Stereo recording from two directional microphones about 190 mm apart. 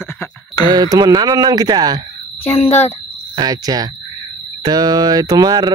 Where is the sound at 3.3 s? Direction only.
20° right (ahead or behind).